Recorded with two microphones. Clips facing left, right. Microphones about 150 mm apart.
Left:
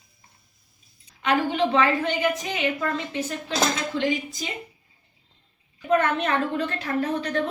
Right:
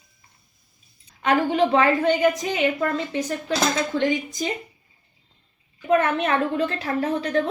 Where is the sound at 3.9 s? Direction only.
50° right (ahead or behind).